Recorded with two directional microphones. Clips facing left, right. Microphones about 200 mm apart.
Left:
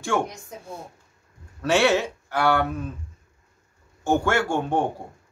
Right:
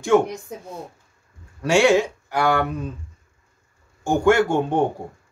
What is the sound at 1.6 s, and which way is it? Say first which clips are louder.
Speech: right 4 dB; 10° right (ahead or behind).